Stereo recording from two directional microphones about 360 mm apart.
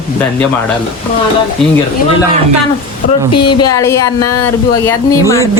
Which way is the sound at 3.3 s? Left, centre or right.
Left.